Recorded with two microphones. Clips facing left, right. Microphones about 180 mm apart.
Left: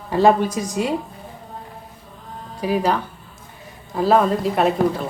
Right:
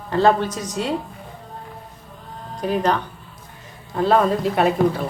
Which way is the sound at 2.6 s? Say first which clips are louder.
Even; 5° left (ahead or behind).